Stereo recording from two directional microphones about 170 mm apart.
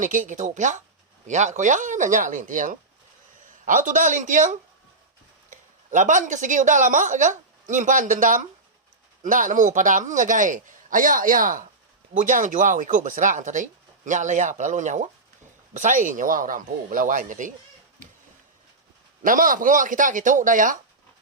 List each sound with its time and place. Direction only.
0.0 s speech: 50° right (ahead or behind)
19.2 s speech: 55° right (ahead or behind)